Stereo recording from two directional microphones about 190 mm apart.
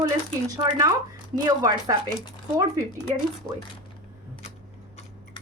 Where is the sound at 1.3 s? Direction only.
20° right (ahead or behind).